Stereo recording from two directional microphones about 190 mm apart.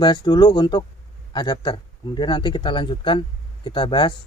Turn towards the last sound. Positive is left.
turn(degrees=25)  # may be behind; listen again after turning